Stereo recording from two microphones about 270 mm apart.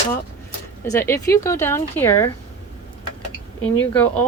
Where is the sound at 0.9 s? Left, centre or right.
Centre.